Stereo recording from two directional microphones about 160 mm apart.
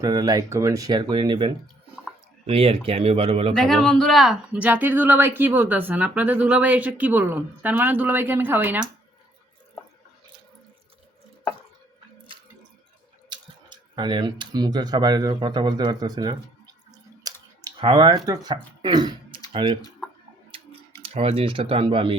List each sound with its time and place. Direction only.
0.0 s speech: 25° right (ahead or behind)
3.6 s speech: 5° left (ahead or behind)
13.3 s speech: 30° right (ahead or behind)
17.2 s a sound: 25° right (ahead or behind)
17.6 s speech: 30° right (ahead or behind)
21.1 s speech: 35° right (ahead or behind)